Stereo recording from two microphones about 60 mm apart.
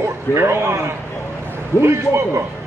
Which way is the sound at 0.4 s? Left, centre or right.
Right.